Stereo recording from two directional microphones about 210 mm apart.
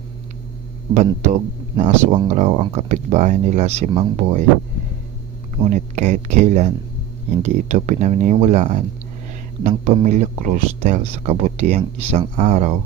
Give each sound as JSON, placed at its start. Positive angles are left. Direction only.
{"t": 0.9, "sound": "speech", "side_deg": -35}
{"t": 5.7, "sound": "speech", "side_deg": -30}